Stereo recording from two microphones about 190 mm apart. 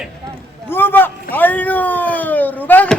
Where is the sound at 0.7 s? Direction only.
10° left (ahead or behind).